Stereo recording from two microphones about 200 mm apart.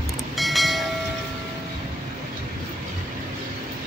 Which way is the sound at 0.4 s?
Centre (ahead or behind).